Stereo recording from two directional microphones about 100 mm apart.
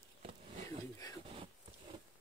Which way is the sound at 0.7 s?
35° left (ahead or behind).